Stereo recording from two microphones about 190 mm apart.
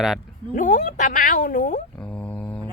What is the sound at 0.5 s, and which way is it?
Speech, 45° left (ahead or behind).